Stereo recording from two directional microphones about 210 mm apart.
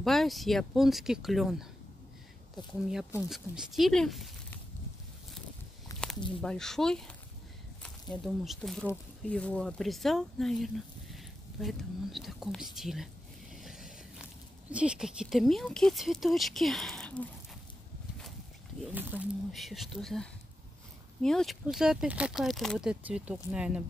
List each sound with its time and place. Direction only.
0.0 s speech: centre (ahead or behind)
5.9 s a sound: 15° left (ahead or behind)
6.4 s speech: centre (ahead or behind)
8.1 s speech: centre (ahead or behind)
13.6 s a sound: centre (ahead or behind)
14.7 s speech: 5° right (ahead or behind)
18.9 s speech: 10° right (ahead or behind)